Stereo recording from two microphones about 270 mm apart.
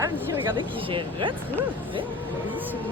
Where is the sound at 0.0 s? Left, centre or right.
Centre.